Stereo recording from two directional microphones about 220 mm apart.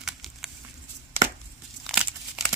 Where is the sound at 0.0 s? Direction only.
Centre (ahead or behind).